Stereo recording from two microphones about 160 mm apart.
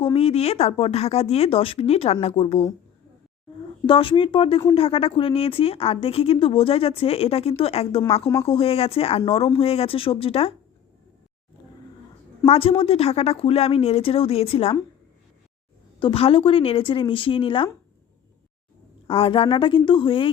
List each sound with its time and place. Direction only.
0.0 s a woman's voice: 35° left (ahead or behind)
3.8 s a woman's voice: 35° left (ahead or behind)
12.5 s a woman's voice: 35° left (ahead or behind)
16.0 s a woman's voice: 35° left (ahead or behind)
19.0 s a woman's voice: 35° left (ahead or behind)